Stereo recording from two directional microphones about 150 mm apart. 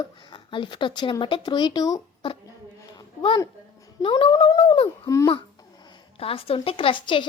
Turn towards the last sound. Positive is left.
turn(degrees=30)  # may be behind; listen again after turning